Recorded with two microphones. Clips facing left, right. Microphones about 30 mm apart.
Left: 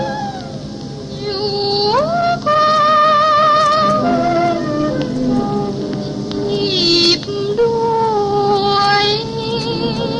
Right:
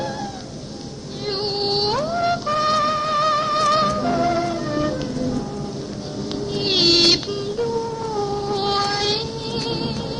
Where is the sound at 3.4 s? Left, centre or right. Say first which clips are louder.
Left 9 dB; left.